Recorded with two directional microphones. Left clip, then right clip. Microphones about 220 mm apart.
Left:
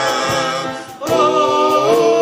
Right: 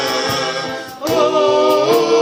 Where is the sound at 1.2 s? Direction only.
50° left (ahead or behind).